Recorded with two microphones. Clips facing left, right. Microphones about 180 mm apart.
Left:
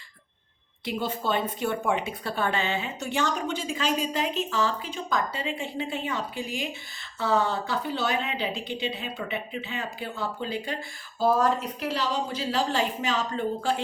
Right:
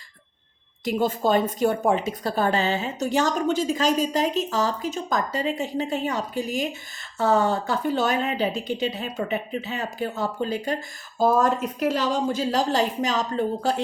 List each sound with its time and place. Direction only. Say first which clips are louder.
0.9 s a woman's voice: right 6 dB; 45° right (ahead or behind)